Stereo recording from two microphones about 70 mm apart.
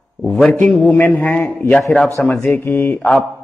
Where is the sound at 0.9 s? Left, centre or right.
Left.